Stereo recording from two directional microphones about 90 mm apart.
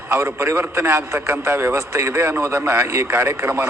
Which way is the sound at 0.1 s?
25° right (ahead or behind).